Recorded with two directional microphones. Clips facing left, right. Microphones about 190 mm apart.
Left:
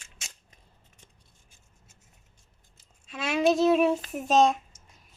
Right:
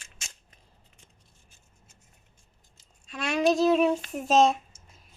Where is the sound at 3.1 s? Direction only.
5° left (ahead or behind).